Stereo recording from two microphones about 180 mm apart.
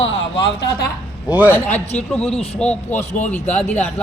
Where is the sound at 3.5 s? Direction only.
10° left (ahead or behind).